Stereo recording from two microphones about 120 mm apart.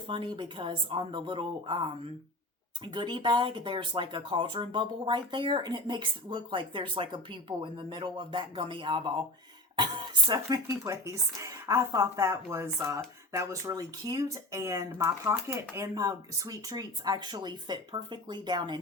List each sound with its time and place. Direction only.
0.1 s speech: 40° right (ahead or behind)